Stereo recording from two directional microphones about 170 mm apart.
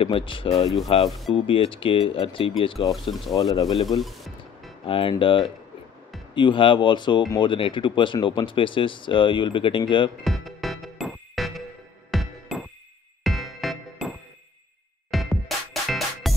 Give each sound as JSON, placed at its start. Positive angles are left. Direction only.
{"t": 0.0, "sound": "speech", "side_deg": 30}
{"t": 2.9, "sound": "speech", "side_deg": 0}
{"t": 3.3, "sound": "speech", "side_deg": 20}
{"t": 4.0, "sound": "music", "side_deg": 0}
{"t": 4.8, "sound": "speech", "side_deg": 30}
{"t": 10.2, "sound": "music", "side_deg": 0}